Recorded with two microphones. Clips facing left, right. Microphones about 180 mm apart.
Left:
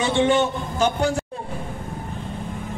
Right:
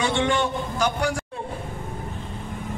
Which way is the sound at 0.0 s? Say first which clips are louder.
Left 4 dB; 20° left (ahead or behind).